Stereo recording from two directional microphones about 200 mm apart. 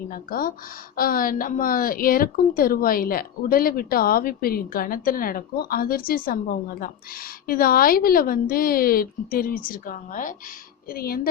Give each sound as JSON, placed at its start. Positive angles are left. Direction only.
{"t": 0.1, "sound": "a woman's voice", "side_deg": 45}